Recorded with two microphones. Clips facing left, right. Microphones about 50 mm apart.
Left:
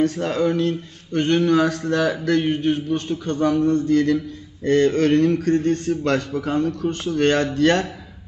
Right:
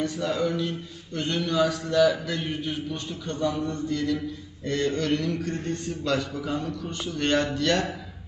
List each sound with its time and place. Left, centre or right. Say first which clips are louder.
0.0 s a man's voice: left 6 dB; left